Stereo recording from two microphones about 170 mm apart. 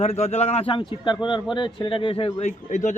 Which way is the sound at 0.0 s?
40° left (ahead or behind).